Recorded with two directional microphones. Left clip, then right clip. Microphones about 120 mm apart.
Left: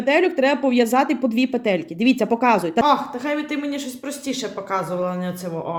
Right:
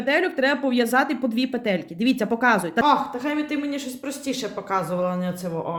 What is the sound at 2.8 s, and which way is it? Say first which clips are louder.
Speech: left 1 dB; 10° right (ahead or behind).